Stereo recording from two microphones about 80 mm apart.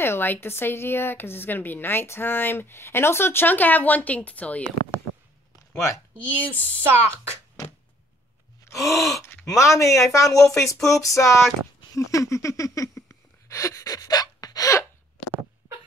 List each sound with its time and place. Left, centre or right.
0.0 s a woman's voice: left
6.1 s a woman's voice: right
8.7 s gasp: centre
9.2 s a sound: left
9.6 s speech: left
11.9 s a sound: left